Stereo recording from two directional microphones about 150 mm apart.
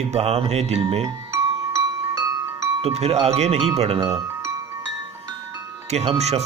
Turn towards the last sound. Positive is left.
turn(degrees=-45)  # may be behind; listen again after turning